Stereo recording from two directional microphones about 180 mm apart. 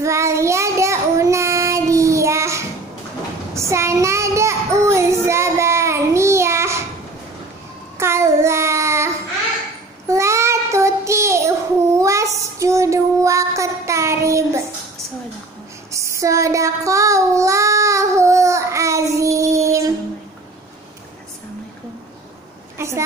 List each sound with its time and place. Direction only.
0.0 s child singing: 15° right (ahead or behind)
8.0 s child singing: 15° right (ahead or behind)
15.9 s child singing: 15° right (ahead or behind)
22.8 s a sound: 15° right (ahead or behind)